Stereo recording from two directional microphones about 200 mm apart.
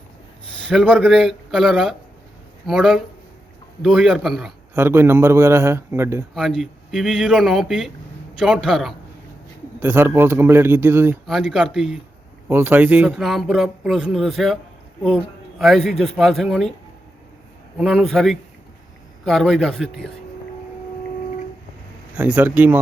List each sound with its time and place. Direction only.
0.7 s speech: 5° right (ahead or behind)
4.7 s a man's voice: 10° right (ahead or behind)
6.3 s speech: centre (ahead or behind)
9.8 s a man's voice: 10° right (ahead or behind)
11.3 s speech: centre (ahead or behind)
17.7 s speech: centre (ahead or behind)
22.1 s a man's voice: 10° right (ahead or behind)